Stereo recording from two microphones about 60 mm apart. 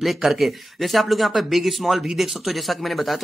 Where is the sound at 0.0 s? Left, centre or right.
Centre.